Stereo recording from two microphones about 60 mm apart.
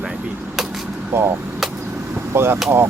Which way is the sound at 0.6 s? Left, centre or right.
Centre.